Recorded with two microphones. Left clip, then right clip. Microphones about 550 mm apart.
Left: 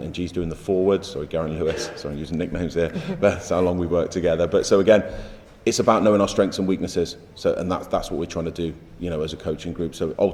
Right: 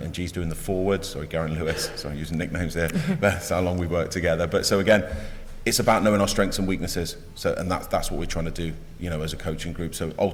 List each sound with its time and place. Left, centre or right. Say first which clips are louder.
0.0 s a man's voice: left 4 dB; right